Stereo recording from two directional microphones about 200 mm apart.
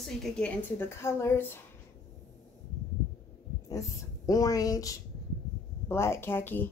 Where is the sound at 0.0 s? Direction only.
5° left (ahead or behind).